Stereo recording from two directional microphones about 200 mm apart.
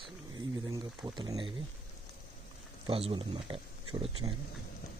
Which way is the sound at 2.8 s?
25° right (ahead or behind).